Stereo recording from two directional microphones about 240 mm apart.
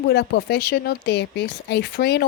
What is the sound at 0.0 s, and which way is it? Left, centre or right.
Speech, left.